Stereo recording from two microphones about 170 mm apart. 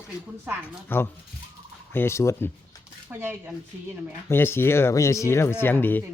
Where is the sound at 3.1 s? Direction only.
15° right (ahead or behind).